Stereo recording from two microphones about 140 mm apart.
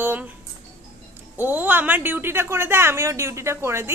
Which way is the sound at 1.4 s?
15° right (ahead or behind).